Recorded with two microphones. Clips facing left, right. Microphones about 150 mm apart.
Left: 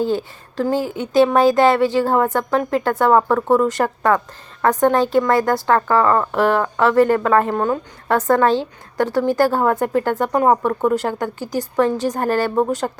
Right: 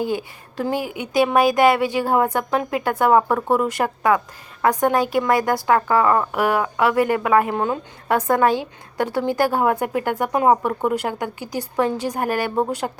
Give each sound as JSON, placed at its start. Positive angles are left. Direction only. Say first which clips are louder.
{"t": 0.0, "sound": "speech", "louder": "left 4 dB", "side_deg": -15}